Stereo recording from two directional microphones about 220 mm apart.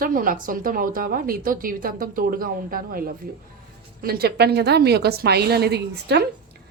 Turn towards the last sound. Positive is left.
turn(degrees=-50)  # may be behind; listen again after turning